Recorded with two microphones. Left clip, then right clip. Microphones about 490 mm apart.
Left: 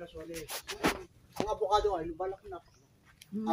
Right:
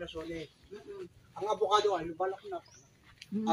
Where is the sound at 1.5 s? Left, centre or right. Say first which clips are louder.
Right 1 dB; left.